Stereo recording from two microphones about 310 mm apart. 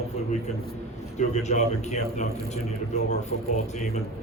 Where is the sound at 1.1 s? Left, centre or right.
Left.